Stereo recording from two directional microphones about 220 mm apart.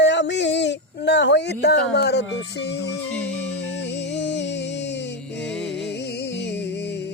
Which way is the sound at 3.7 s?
55° left (ahead or behind).